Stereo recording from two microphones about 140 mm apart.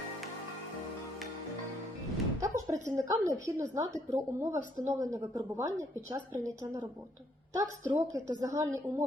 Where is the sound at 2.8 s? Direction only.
25° right (ahead or behind).